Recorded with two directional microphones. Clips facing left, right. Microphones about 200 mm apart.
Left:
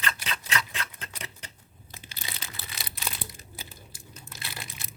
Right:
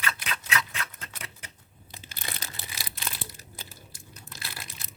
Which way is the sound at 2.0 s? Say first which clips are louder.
Right 2 dB; 50° right (ahead or behind).